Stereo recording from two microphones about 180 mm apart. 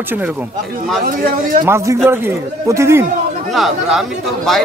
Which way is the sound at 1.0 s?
50° right (ahead or behind).